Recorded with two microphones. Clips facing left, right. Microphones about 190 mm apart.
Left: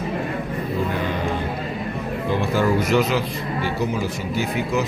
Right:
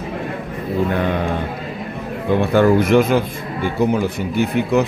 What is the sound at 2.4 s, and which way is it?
A man's voice, 60° right (ahead or behind).